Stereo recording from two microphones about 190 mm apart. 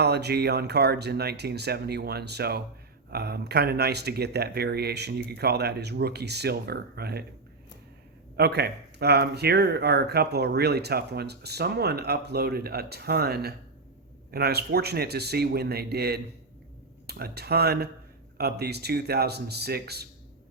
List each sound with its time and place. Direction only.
0.0 s speech: 60° right (ahead or behind)
8.4 s speech: 60° right (ahead or behind)